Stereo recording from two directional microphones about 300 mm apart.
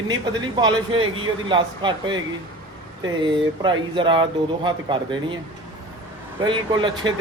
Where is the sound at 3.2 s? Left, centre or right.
Centre.